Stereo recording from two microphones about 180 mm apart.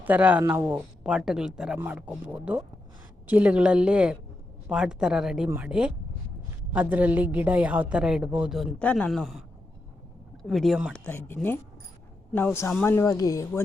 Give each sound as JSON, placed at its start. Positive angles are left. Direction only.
{"t": 0.0, "sound": "a woman's voice", "side_deg": -10}
{"t": 10.4, "sound": "a woman's voice", "side_deg": 0}
{"t": 12.8, "sound": "speech", "side_deg": 15}